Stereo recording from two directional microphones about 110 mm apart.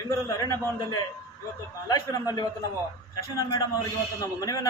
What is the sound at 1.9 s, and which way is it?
Speech, 35° left (ahead or behind).